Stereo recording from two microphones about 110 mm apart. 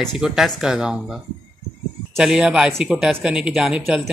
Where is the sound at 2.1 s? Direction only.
5° right (ahead or behind).